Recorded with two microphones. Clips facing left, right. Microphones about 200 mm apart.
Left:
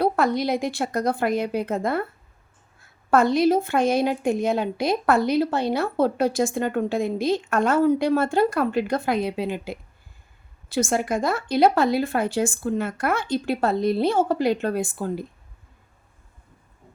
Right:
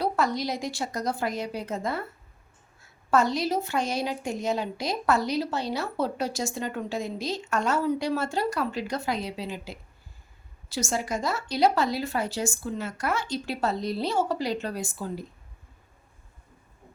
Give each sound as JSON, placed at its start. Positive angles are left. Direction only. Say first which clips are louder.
{"t": 0.0, "sound": "a woman's voice", "louder": "left 5 dB", "side_deg": 55}